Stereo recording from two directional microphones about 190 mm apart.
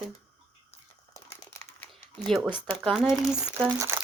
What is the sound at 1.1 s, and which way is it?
Typing, 15° left (ahead or behind).